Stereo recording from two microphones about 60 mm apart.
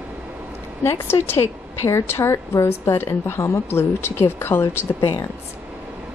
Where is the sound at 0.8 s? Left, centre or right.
Left.